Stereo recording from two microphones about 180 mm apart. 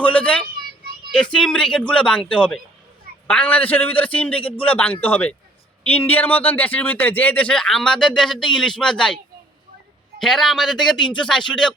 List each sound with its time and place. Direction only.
0.0 s vehicle: 10° left (ahead or behind)
1.1 s a man's voice: 5° left (ahead or behind)
10.2 s speech: centre (ahead or behind)